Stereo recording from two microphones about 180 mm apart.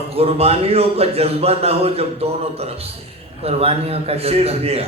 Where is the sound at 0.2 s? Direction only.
35° right (ahead or behind).